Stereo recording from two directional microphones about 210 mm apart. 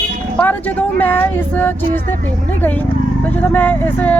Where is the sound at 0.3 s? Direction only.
5° left (ahead or behind).